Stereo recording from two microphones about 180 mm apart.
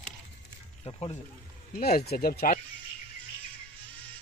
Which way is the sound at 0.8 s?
30° left (ahead or behind).